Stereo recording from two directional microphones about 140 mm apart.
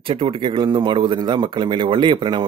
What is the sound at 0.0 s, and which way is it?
Speech, 40° right (ahead or behind).